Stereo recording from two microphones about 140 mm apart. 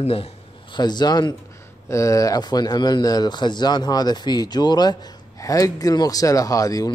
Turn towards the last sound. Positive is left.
turn(degrees=25)  # may be behind; listen again after turning